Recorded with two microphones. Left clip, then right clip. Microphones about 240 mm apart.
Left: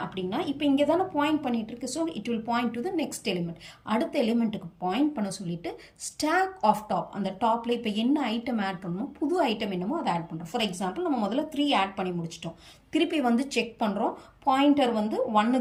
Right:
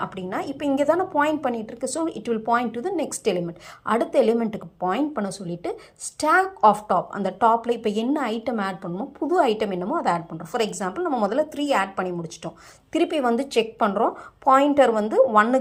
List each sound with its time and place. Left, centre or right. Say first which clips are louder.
0.3 s a woman's voice: right 1 dB; centre